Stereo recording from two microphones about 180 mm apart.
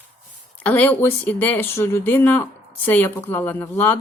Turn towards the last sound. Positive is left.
turn(degrees=10)  # may be behind; listen again after turning